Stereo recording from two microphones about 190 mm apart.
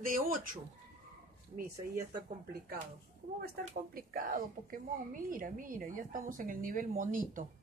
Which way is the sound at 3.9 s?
50° right (ahead or behind).